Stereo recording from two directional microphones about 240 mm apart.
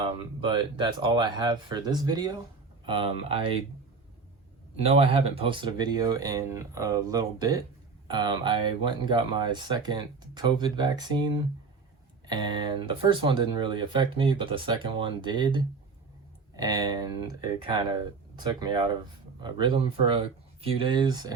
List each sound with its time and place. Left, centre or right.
0.0 s speech: centre
4.9 s speech: right